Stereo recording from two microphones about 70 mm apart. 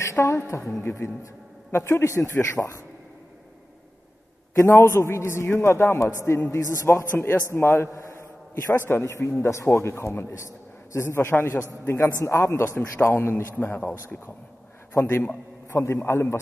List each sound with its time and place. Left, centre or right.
0.0 s a woman's voice: left
4.6 s a man's voice: left